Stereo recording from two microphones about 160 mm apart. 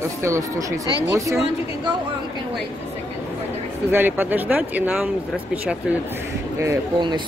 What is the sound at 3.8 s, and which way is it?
Speech, 10° right (ahead or behind).